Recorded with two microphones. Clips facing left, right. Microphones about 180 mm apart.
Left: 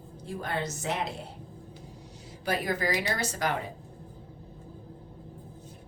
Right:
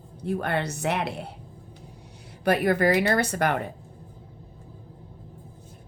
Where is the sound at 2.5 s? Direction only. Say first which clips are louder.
Right 8 dB; 60° right (ahead or behind).